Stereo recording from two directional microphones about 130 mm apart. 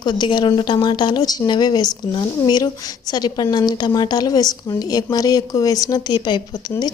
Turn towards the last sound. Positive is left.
turn(degrees=35)  # may be behind; listen again after turning